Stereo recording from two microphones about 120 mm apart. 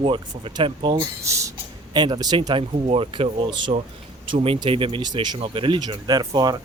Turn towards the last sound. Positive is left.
turn(degrees=-35)  # may be behind; listen again after turning